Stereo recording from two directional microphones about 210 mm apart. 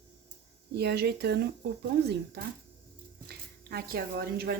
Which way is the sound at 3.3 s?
45° right (ahead or behind).